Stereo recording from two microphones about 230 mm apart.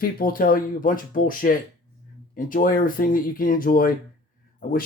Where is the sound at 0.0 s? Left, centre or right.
Left.